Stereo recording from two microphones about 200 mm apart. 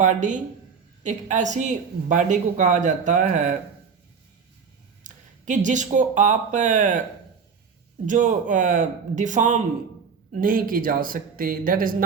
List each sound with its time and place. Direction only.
0.0 s a woman's voice: 40° right (ahead or behind)
5.0 s speech: 40° right (ahead or behind)
8.0 s a woman's voice: 40° right (ahead or behind)